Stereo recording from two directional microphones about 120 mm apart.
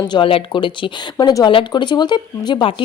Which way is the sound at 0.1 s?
50° left (ahead or behind).